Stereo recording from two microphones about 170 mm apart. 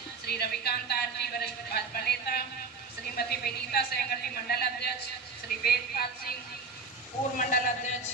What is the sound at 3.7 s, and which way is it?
Speech, 65° left (ahead or behind).